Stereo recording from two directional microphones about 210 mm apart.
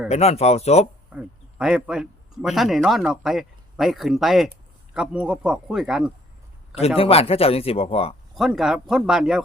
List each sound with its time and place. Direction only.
0.1 s speech: 30° left (ahead or behind)
1.1 s speech: 5° right (ahead or behind)
6.7 s speech: 30° left (ahead or behind)
8.4 s speech: centre (ahead or behind)